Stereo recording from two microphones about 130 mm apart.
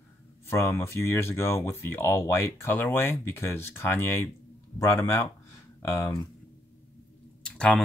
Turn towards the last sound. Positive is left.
turn(degrees=5)  # may be behind; listen again after turning